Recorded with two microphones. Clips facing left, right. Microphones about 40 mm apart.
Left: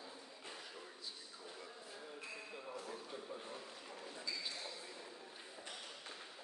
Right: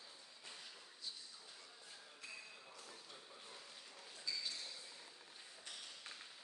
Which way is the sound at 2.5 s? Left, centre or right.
Left.